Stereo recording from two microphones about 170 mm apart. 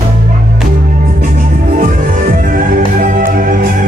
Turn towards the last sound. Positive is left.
turn(degrees=-50)  # may be behind; listen again after turning